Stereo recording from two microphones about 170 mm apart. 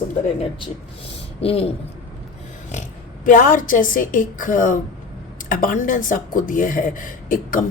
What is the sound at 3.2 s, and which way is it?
A woman's voice, 50° left (ahead or behind).